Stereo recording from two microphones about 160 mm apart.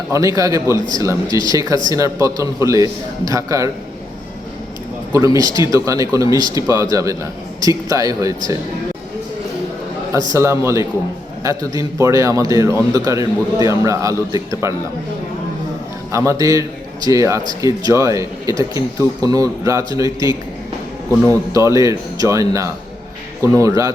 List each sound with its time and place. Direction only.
0.1 s a man's voice: 20° right (ahead or behind)
5.1 s a man's voice: 20° right (ahead or behind)
10.3 s a man's voice: 15° right (ahead or behind)
16.1 s a man's voice: 20° right (ahead or behind)